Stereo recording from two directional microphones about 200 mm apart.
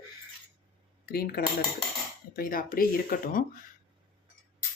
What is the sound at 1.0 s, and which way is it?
Speech, 50° left (ahead or behind).